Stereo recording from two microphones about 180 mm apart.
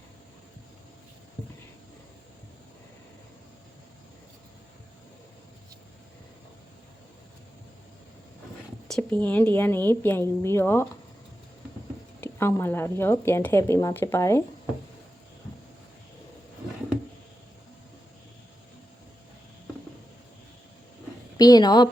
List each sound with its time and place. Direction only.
8.9 s speech: 10° left (ahead or behind)
12.2 s speech: 15° left (ahead or behind)
21.3 s a woman's voice: 20° left (ahead or behind)